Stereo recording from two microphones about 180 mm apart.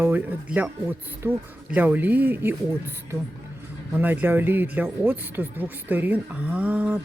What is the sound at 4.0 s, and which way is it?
Speech, 10° right (ahead or behind).